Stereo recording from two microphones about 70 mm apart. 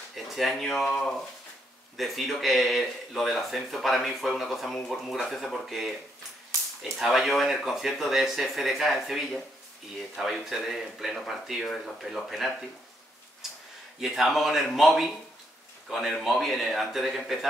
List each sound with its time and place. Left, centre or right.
0.1 s speech: centre
13.4 s a sound: centre
13.9 s speech: centre